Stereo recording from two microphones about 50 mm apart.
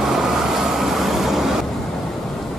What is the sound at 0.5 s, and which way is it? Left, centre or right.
Vehicle, centre.